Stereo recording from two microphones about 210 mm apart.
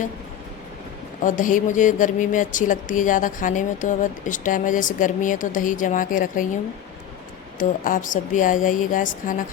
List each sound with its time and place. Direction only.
1.2 s speech: 40° left (ahead or behind)
7.6 s speech: 40° left (ahead or behind)